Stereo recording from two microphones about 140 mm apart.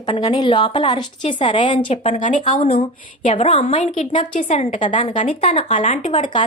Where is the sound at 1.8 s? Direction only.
50° left (ahead or behind).